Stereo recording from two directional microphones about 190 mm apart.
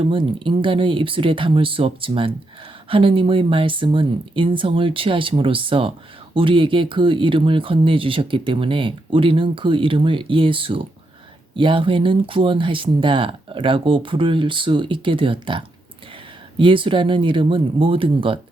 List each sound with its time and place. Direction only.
0.0 s speech: 25° right (ahead or behind)